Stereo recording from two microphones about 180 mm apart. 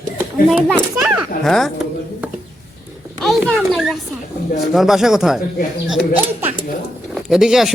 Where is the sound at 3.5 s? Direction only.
Centre (ahead or behind).